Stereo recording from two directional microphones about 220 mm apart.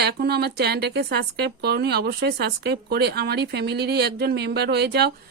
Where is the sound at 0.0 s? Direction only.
45° right (ahead or behind).